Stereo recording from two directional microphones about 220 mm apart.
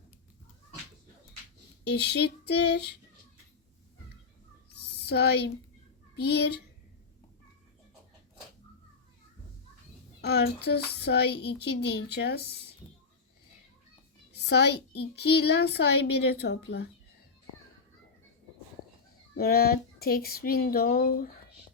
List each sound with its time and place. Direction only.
1.9 s a child's voice: 50° left (ahead or behind)
4.8 s a sound: 45° left (ahead or behind)
6.1 s a child's voice: 50° left (ahead or behind)
10.2 s a child's voice: 50° left (ahead or behind)
14.3 s a child's voice: 50° left (ahead or behind)
19.4 s a child's voice: 45° left (ahead or behind)